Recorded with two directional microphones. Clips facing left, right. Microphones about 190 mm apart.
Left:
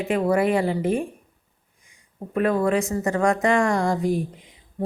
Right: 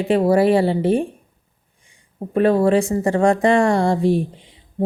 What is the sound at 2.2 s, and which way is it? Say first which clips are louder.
Speech: right 6 dB; 30° right (ahead or behind).